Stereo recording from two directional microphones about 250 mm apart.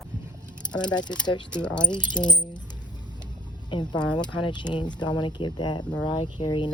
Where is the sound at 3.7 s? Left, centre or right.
Centre.